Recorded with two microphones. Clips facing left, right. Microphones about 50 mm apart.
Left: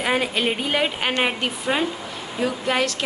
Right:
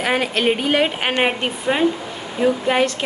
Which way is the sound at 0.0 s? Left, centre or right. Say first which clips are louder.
Right 3 dB; centre.